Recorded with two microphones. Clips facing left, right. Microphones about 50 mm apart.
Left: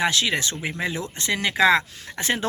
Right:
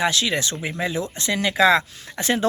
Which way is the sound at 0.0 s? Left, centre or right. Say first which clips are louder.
Right 1 dB; left.